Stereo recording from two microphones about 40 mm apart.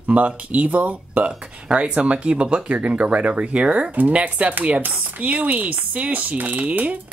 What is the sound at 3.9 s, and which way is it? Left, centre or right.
Speech, right.